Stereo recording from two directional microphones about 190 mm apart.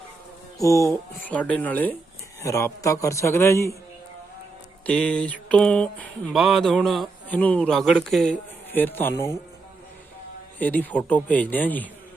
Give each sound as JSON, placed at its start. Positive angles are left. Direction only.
{"t": 0.6, "sound": "a man's voice", "side_deg": 15}
{"t": 4.9, "sound": "a sound", "side_deg": 5}
{"t": 10.6, "sound": "a man's voice", "side_deg": 10}